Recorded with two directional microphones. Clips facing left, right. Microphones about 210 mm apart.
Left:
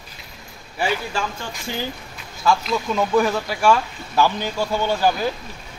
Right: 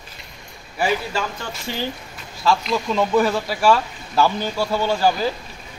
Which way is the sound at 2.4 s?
Centre (ahead or behind).